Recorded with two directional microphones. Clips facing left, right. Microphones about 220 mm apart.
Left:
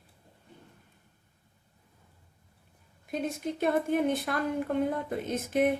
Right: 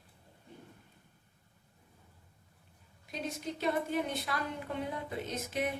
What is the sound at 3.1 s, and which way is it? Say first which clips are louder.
A woman's voice: left 6 dB; 55° left (ahead or behind).